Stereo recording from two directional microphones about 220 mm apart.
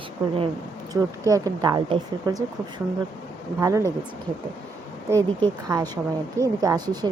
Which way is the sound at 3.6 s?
15° right (ahead or behind).